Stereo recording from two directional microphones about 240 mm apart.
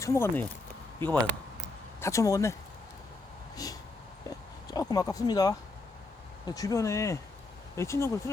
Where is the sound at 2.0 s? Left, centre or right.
Centre.